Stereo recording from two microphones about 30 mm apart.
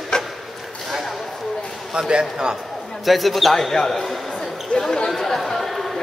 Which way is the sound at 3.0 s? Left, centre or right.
Centre.